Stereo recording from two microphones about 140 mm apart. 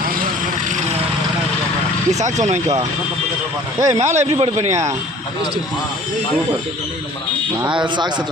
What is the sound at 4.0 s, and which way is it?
Speech, 55° right (ahead or behind).